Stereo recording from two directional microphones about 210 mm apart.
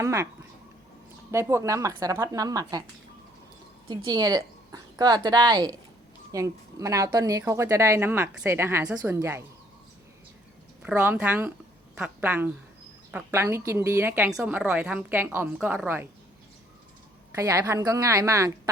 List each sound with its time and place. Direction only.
0.0 s a woman's voice: 15° right (ahead or behind)
1.3 s a woman's voice: 15° right (ahead or behind)
3.8 s a woman's voice: 20° right (ahead or behind)
10.8 s a woman's voice: 10° right (ahead or behind)
17.3 s a woman's voice: 15° right (ahead or behind)